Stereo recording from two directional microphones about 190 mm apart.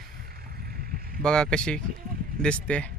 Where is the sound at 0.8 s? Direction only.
50° right (ahead or behind).